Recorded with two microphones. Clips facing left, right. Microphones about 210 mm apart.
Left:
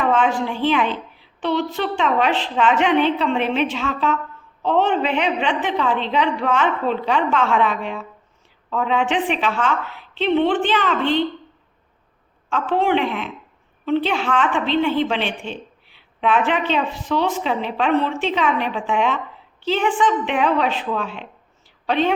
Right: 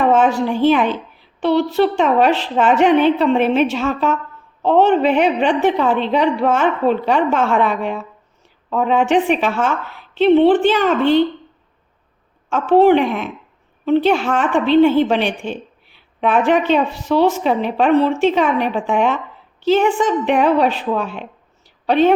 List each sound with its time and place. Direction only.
0.1 s a woman's voice: 40° right (ahead or behind)
12.5 s a woman's voice: 45° right (ahead or behind)